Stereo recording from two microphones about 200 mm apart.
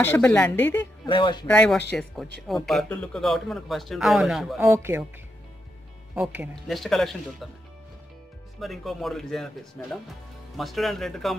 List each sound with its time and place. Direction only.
0.0 s a woman's voice: 10° left (ahead or behind)
1.0 s speech: 25° left (ahead or behind)
1.5 s speech: 5° left (ahead or behind)
4.6 s speech: 10° right (ahead or behind)
6.1 s speech: 5° right (ahead or behind)
8.5 s speech: centre (ahead or behind)